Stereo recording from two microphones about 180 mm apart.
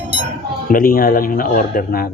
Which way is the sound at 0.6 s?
50° left (ahead or behind).